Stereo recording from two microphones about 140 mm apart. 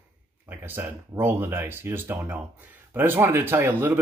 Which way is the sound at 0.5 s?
15° right (ahead or behind).